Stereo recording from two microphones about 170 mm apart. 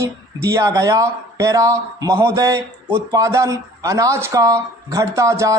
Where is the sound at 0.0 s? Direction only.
15° right (ahead or behind).